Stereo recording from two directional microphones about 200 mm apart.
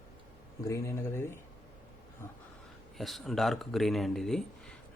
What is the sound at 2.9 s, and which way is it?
Speech, centre (ahead or behind).